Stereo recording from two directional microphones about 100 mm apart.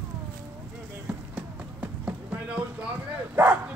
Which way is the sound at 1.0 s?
15° right (ahead or behind).